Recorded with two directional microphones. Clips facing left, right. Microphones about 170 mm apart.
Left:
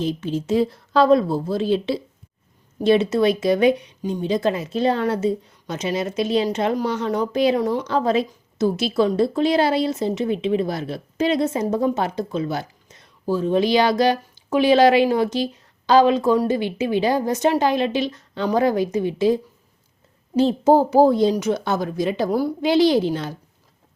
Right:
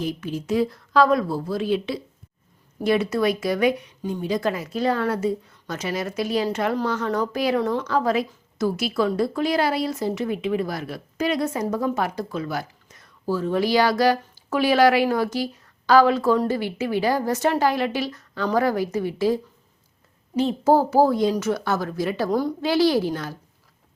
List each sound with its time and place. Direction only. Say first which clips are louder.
0.0 s speech: left 4 dB; 25° left (ahead or behind)
20.3 s a child's voice: left 4 dB; 30° left (ahead or behind)
20.7 s speech: left 2 dB; 20° left (ahead or behind)
22.7 s speech: left 3 dB; 20° left (ahead or behind)